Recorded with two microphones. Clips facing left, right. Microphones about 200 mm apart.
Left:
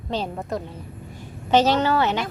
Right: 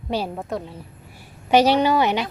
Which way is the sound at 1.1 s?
10° right (ahead or behind).